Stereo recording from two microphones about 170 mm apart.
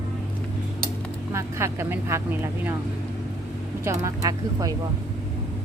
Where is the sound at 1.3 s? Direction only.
15° right (ahead or behind).